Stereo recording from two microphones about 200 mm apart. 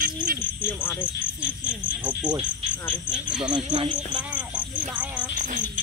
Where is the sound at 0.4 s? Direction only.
10° left (ahead or behind).